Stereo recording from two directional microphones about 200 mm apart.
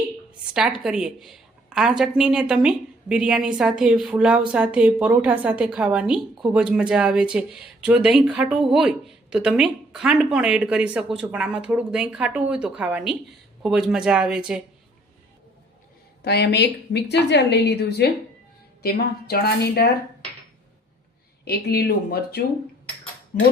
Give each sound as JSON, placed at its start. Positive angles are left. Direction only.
{"t": 0.3, "sound": "a woman's voice", "side_deg": -5}
{"t": 16.2, "sound": "a woman's voice", "side_deg": 55}
{"t": 21.4, "sound": "a woman's voice", "side_deg": 50}